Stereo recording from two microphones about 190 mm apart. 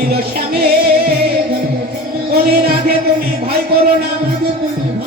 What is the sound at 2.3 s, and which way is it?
Speech, 50° right (ahead or behind).